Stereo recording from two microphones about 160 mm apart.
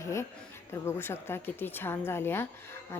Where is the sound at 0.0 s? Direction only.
15° left (ahead or behind).